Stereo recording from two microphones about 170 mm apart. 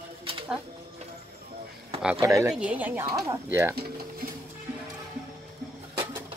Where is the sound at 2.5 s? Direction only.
5° right (ahead or behind).